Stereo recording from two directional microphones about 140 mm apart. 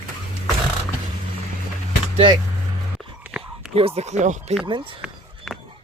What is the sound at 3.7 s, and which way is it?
Speech, 45° right (ahead or behind).